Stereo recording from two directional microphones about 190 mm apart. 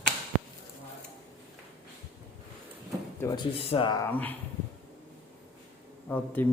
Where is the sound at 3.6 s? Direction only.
30° left (ahead or behind).